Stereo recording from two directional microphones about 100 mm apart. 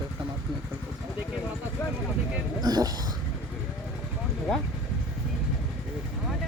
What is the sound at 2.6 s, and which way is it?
Speech, 40° right (ahead or behind).